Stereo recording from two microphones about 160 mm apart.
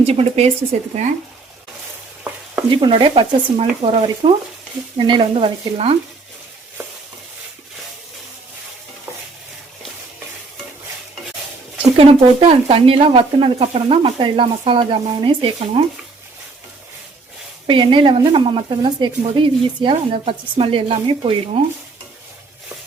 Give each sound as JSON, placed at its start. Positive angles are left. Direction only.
{"t": 0.0, "sound": "speech", "side_deg": -40}
{"t": 2.6, "sound": "speech", "side_deg": -30}
{"t": 11.9, "sound": "speech", "side_deg": -35}
{"t": 17.7, "sound": "speech", "side_deg": -30}